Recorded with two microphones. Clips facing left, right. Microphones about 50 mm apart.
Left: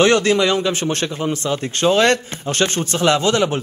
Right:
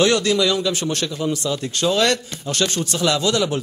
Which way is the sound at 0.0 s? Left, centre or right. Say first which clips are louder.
Left 3 dB; left.